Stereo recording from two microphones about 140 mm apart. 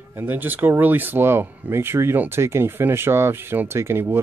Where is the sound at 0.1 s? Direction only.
15° right (ahead or behind).